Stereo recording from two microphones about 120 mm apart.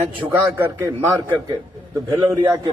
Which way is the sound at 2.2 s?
15° right (ahead or behind).